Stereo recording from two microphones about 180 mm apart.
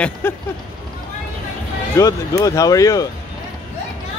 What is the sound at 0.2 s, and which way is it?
Speech, 10° left (ahead or behind).